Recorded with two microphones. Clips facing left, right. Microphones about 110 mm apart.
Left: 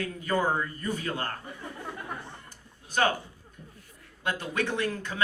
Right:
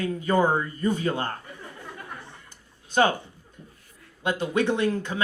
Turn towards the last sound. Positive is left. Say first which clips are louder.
# right 6 dB
turn(degrees=-20)  # may be behind; listen again after turning